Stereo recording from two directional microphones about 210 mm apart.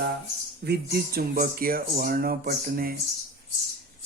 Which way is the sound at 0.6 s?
45° right (ahead or behind).